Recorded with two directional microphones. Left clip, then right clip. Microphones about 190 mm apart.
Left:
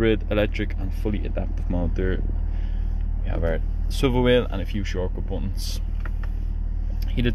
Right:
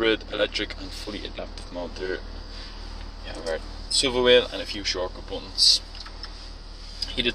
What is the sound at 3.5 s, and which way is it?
Speech, 25° left (ahead or behind).